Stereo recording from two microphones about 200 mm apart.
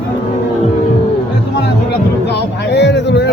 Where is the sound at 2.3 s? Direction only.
60° left (ahead or behind).